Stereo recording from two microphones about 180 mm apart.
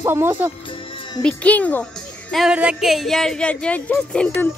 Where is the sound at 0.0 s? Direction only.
15° right (ahead or behind).